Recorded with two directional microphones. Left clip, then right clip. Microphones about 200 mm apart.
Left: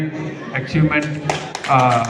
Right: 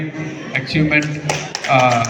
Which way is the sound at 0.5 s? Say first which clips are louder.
Right 3 dB; 20° left (ahead or behind).